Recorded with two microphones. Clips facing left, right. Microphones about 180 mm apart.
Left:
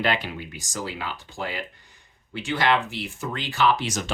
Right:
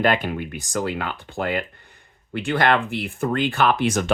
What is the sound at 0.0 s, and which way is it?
Speech, 50° right (ahead or behind).